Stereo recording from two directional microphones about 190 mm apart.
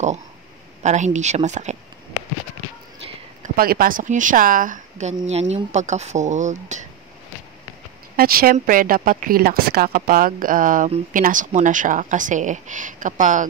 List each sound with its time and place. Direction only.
0.8 s speech: 40° right (ahead or behind)
3.4 s speech: 50° right (ahead or behind)
8.2 s speech: 50° right (ahead or behind)